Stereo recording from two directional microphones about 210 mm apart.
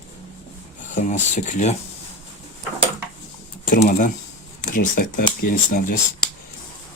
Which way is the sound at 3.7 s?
40° left (ahead or behind).